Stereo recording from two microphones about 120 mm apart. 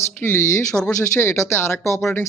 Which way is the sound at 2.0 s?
15° left (ahead or behind).